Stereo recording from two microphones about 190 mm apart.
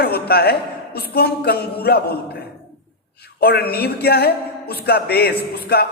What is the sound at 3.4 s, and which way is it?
A man's voice, 55° left (ahead or behind).